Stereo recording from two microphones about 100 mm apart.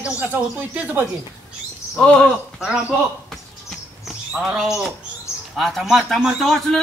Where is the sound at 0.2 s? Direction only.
15° right (ahead or behind).